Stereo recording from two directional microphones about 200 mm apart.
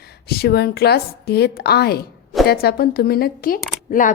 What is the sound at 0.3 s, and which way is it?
Speech, 50° left (ahead or behind).